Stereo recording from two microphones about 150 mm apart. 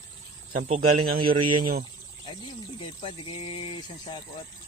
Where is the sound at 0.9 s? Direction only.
80° right.